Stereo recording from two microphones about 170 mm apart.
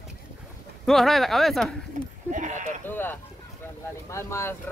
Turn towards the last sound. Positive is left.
turn(degrees=15)  # may be behind; listen again after turning